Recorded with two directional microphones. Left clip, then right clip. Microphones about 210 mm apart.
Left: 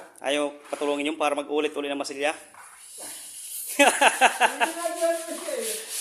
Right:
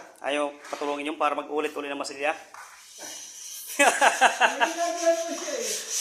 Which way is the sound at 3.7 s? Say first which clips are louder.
Left 1 dB; 35° left (ahead or behind).